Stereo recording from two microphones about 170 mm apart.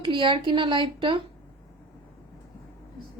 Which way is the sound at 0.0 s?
30° right (ahead or behind).